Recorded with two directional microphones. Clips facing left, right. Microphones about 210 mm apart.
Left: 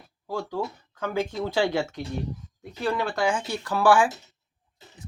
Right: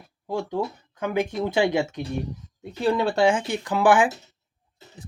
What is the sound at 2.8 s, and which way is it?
Speech, 30° right (ahead or behind).